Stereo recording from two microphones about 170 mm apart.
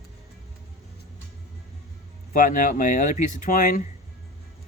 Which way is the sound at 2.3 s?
50° left (ahead or behind).